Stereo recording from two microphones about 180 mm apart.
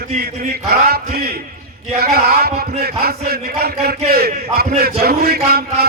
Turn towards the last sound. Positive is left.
turn(degrees=-60)  # may be behind; listen again after turning